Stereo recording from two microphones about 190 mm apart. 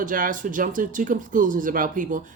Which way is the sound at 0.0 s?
45° right (ahead or behind).